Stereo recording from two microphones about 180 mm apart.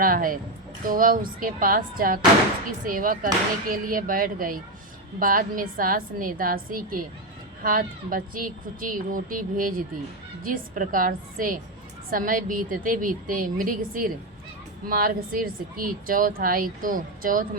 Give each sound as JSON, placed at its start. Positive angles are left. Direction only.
{"t": 0.0, "sound": "speech", "side_deg": -50}